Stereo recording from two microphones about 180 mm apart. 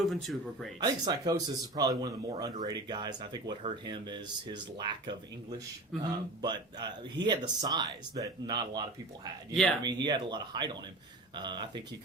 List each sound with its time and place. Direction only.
0.0 s speech: centre (ahead or behind)
0.8 s speech: 20° right (ahead or behind)
9.8 s speech: 25° right (ahead or behind)